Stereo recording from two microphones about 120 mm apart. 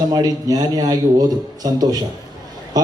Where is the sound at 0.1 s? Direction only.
30° right (ahead or behind).